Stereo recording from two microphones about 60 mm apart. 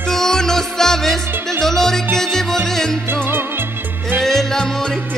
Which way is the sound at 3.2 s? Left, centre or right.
Right.